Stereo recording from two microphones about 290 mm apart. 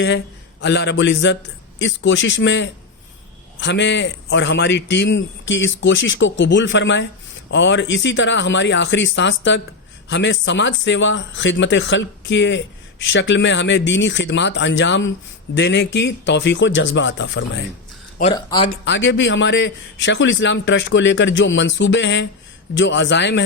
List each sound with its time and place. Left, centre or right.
0.6 s a man's voice: left
18.2 s speech: centre
18.9 s a man's voice: left